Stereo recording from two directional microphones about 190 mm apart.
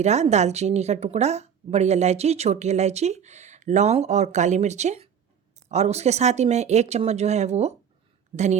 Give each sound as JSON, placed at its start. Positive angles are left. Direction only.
{"t": 0.0, "sound": "speech", "side_deg": -35}